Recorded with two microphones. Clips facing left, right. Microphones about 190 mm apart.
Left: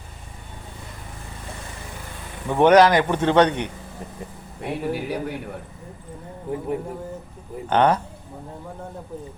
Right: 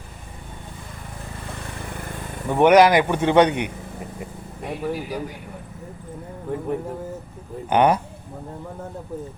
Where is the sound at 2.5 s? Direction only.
15° right (ahead or behind).